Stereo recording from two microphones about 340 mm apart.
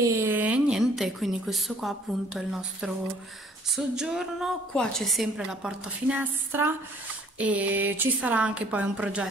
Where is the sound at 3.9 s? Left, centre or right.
Centre.